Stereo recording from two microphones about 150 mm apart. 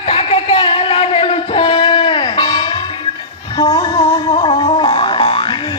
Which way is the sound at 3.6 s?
25° left (ahead or behind).